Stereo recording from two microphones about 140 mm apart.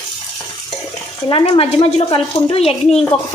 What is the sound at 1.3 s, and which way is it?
Speech, 40° left (ahead or behind).